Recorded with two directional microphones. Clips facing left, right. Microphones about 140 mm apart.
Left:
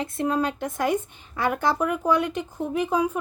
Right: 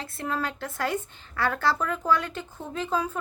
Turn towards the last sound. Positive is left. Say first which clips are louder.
# left 5 dB
turn(degrees=15)  # may be behind; listen again after turning